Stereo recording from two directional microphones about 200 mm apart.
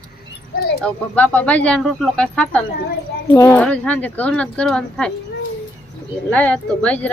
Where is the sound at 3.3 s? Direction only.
15° left (ahead or behind).